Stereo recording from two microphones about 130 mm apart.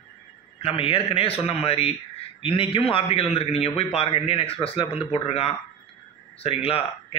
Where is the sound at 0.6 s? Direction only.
45° left (ahead or behind).